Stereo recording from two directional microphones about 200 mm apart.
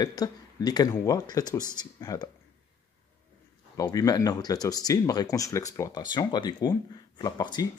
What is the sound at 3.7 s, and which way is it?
Speech, 20° left (ahead or behind).